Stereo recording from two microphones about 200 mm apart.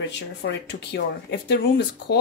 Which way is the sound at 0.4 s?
55° left (ahead or behind).